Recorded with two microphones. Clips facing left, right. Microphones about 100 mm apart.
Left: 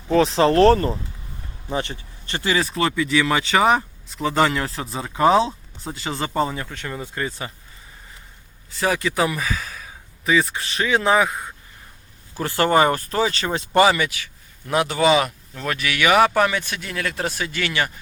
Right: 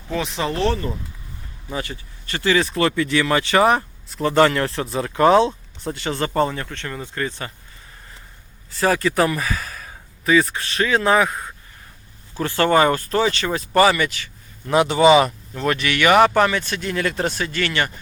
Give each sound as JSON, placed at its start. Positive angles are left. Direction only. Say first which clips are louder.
{"t": 0.1, "sound": "speech", "louder": "left 8 dB", "side_deg": 35}
{"t": 0.5, "sound": "speech", "louder": "left 7 dB", "side_deg": 45}
{"t": 1.7, "sound": "speech", "louder": "left 3 dB", "side_deg": 25}
{"t": 2.6, "sound": "speech", "louder": "right 1 dB", "side_deg": 5}
{"t": 8.7, "sound": "speech", "louder": "right 3 dB", "side_deg": 0}
{"t": 12.4, "sound": "speech", "louder": "right 1 dB", "side_deg": 20}
{"t": 14.7, "sound": "speech", "louder": "right 4 dB", "side_deg": 0}
{"t": 16.9, "sound": "speech", "louder": "right 3 dB", "side_deg": 0}